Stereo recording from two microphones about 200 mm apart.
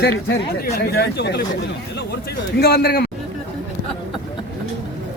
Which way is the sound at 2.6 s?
50° left (ahead or behind).